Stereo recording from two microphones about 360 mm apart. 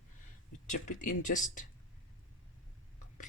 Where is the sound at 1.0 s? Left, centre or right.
Left.